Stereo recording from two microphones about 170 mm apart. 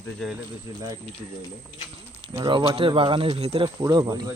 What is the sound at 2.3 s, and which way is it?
Speech, 25° right (ahead or behind).